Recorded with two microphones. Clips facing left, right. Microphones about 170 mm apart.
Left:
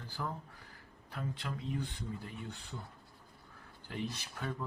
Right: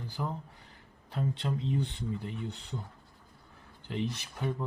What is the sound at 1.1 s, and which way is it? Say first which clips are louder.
Speech: right 7 dB; 30° right (ahead or behind).